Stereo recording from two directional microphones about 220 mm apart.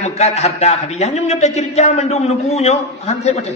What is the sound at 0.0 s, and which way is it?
A man's voice, 30° left (ahead or behind).